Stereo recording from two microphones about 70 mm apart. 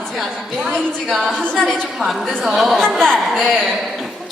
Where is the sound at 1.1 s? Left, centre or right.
Centre.